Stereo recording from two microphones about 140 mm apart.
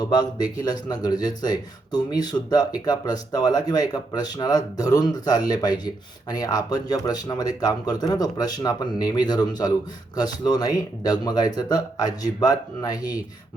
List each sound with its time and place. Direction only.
0.0 s speech: 30° left (ahead or behind)